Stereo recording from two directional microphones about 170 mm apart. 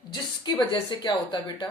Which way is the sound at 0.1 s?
25° left (ahead or behind).